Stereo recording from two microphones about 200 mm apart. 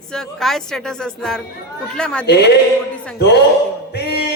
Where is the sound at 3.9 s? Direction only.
55° left (ahead or behind).